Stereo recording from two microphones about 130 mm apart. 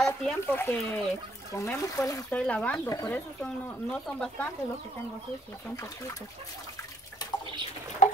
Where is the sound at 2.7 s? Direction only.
25° left (ahead or behind).